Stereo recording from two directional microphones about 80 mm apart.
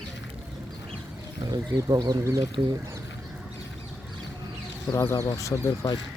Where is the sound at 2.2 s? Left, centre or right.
Right.